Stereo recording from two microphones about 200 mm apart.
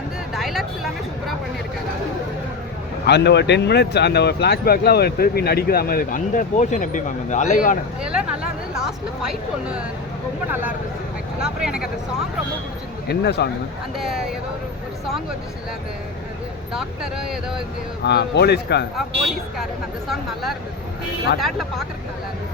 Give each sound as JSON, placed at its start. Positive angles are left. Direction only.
{"t": 0.3, "sound": "a sound", "side_deg": 0}
{"t": 3.1, "sound": "speech", "side_deg": 60}
{"t": 8.0, "sound": "speech", "side_deg": -5}
{"t": 11.4, "sound": "speech", "side_deg": -5}
{"t": 13.1, "sound": "speech", "side_deg": 55}
{"t": 14.0, "sound": "speech", "side_deg": 0}
{"t": 16.7, "sound": "speech", "side_deg": 0}
{"t": 18.0, "sound": "speech", "side_deg": 55}
{"t": 20.1, "sound": "speech", "side_deg": 0}